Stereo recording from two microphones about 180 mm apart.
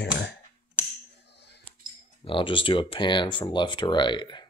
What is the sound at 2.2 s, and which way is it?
Speech, 30° left (ahead or behind).